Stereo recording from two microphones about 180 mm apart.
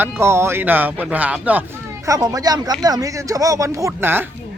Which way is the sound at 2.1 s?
20° right (ahead or behind).